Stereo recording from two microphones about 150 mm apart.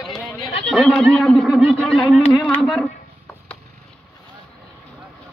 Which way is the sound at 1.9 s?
35° left (ahead or behind).